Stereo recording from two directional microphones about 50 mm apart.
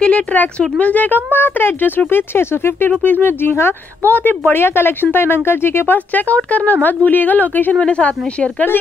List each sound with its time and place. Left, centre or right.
0.0 s speech: left
2.9 s speech: left
4.1 s speech: left
5.9 s speech: left
7.8 s speech: left